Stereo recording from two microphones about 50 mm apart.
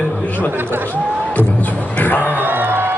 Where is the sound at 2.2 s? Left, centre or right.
Right.